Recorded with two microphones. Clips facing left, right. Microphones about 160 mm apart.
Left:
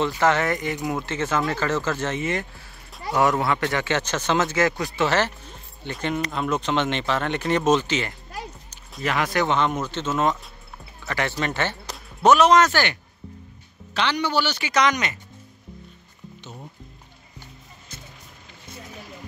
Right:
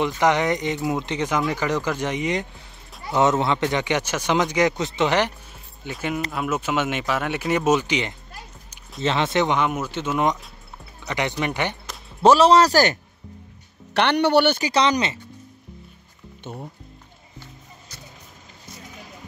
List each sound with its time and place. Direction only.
0.2 s a man's voice: 15° right (ahead or behind)
9.6 s a man's voice: 10° right (ahead or behind)
12.2 s speech: 30° right (ahead or behind)
13.9 s speech: 60° right (ahead or behind)
14.6 s speech: 30° right (ahead or behind)